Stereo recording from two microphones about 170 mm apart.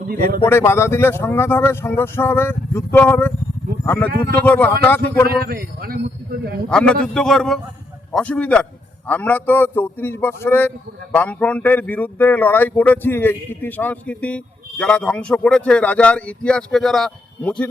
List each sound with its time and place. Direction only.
0.1 s a man's voice: 60° right (ahead or behind)
0.4 s speech: 15° left (ahead or behind)
5.4 s a man's voice: 60° right (ahead or behind)
6.7 s speech: 5° left (ahead or behind)